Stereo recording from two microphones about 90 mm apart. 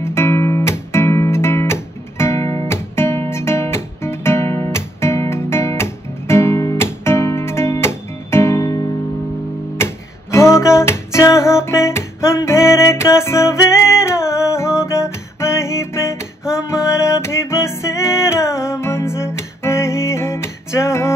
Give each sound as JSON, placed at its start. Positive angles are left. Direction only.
{"t": 0.0, "sound": "music", "side_deg": 30}
{"t": 9.8, "sound": "music", "side_deg": 30}